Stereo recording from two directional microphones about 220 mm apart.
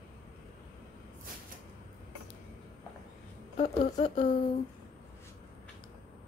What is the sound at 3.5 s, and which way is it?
Speech, 25° left (ahead or behind).